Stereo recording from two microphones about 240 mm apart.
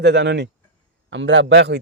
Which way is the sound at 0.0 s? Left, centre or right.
Right.